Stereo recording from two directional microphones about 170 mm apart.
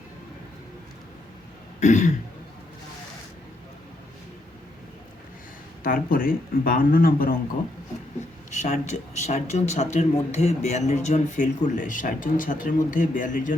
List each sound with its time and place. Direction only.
1.8 s speech: 45° left (ahead or behind)
5.8 s speech: 55° left (ahead or behind)
8.4 s speech: 45° left (ahead or behind)